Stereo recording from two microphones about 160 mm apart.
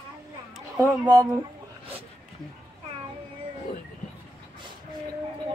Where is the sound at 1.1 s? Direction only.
20° right (ahead or behind).